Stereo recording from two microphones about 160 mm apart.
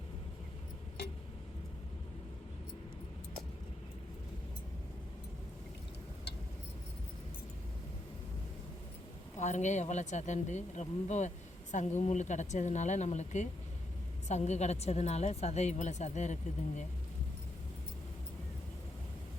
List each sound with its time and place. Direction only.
9.4 s a woman's voice: 45° left (ahead or behind)